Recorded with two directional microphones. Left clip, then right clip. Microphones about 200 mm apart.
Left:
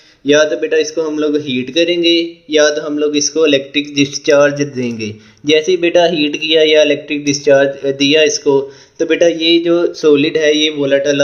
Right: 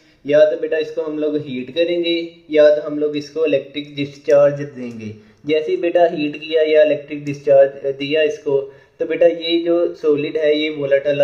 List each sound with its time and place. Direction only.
0.3 s a man's voice: 45° left (ahead or behind)